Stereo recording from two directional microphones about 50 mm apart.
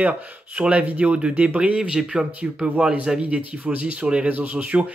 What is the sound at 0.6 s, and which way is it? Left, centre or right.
Speech, right.